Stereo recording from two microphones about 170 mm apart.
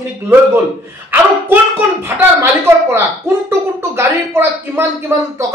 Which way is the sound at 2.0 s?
15° right (ahead or behind).